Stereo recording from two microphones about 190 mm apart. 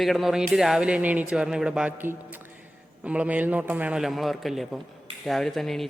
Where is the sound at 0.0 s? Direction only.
Centre (ahead or behind).